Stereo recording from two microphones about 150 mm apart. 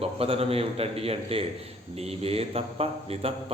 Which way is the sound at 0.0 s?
40° right (ahead or behind).